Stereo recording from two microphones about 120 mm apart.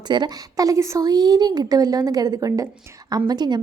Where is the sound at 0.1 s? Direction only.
35° right (ahead or behind).